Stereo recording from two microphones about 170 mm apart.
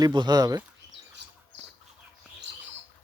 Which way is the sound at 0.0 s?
25° right (ahead or behind).